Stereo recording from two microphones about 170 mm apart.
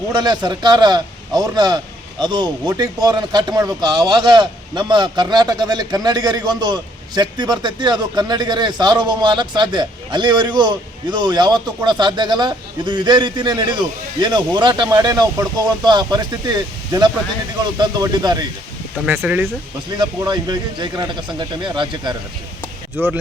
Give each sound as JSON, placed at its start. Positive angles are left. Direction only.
{"t": 0.1, "sound": "a man's voice", "side_deg": -25}
{"t": 19.0, "sound": "speech", "side_deg": -10}
{"t": 20.0, "sound": "a man's voice", "side_deg": -25}
{"t": 23.0, "sound": "speech", "side_deg": -10}